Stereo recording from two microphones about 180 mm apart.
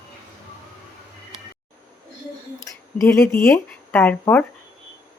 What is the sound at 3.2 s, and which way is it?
A woman's voice, 15° left (ahead or behind).